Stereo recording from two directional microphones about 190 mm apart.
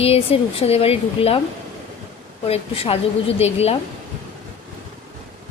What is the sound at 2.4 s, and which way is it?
A woman's voice, 30° left (ahead or behind).